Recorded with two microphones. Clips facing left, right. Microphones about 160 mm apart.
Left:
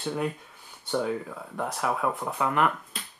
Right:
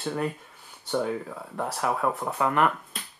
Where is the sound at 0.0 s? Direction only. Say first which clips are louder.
Even; centre (ahead or behind).